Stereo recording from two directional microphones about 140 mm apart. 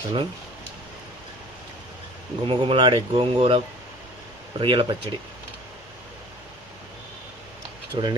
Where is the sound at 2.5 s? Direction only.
40° right (ahead or behind).